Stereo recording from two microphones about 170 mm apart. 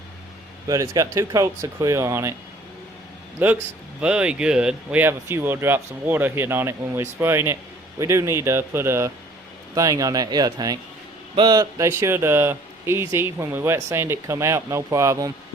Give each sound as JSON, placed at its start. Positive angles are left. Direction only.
{"t": 0.7, "sound": "speech", "side_deg": -20}
{"t": 3.4, "sound": "speech", "side_deg": -10}